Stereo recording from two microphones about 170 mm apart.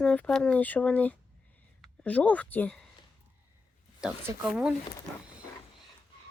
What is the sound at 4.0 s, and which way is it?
Speech, 5° right (ahead or behind).